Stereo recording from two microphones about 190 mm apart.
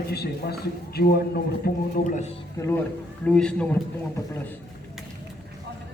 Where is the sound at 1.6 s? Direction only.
40° left (ahead or behind).